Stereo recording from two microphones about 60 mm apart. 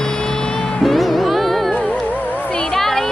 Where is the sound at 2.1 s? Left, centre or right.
Left.